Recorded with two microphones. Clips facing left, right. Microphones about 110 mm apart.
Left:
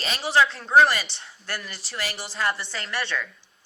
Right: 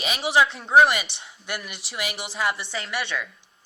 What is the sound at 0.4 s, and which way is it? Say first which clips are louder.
Speech: right 1 dB; 20° right (ahead or behind).